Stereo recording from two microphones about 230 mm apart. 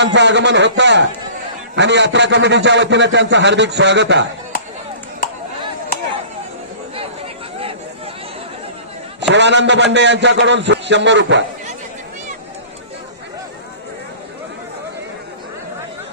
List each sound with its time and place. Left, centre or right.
0.0 s a man's voice: right
9.3 s a man's voice: right